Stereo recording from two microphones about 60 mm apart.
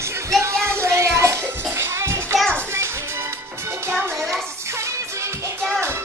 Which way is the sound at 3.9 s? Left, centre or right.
Centre.